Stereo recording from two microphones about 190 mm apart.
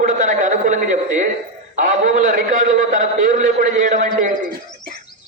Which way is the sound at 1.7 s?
40° right (ahead or behind).